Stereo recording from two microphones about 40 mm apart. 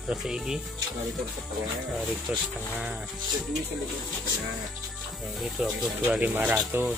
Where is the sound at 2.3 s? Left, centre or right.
Right.